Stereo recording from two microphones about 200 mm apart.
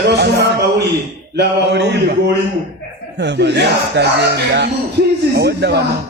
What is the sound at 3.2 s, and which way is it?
A man's voice, 60° right (ahead or behind).